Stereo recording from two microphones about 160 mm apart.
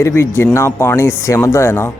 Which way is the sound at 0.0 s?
15° left (ahead or behind).